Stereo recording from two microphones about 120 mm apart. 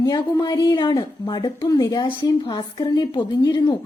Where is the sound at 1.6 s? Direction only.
30° left (ahead or behind).